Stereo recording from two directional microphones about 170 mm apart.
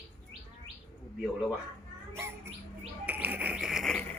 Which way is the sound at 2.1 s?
15° right (ahead or behind).